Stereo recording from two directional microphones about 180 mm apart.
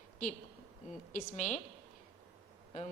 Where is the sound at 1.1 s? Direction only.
45° left (ahead or behind).